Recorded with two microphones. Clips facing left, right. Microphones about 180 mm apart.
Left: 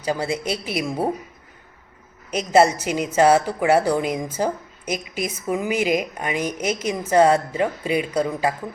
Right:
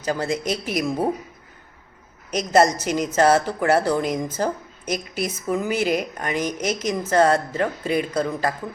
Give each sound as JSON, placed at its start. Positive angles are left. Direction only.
{"t": 0.0, "sound": "a woman's voice", "side_deg": 10}
{"t": 0.4, "sound": "a woman's voice", "side_deg": -40}
{"t": 0.8, "sound": "a woman's voice", "side_deg": 10}
{"t": 2.5, "sound": "a woman's voice", "side_deg": 10}